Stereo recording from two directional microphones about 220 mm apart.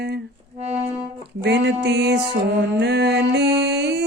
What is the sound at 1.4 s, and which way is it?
Music, 50° right (ahead or behind).